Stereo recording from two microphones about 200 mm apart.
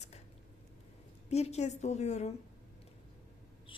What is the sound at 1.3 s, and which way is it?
Speech, 30° left (ahead or behind).